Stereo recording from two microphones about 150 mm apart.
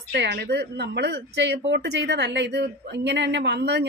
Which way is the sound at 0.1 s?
90° right.